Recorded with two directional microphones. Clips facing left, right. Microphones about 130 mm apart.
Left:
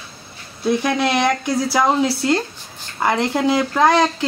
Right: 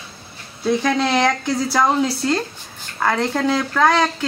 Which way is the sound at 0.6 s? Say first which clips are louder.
Even; 10° left (ahead or behind).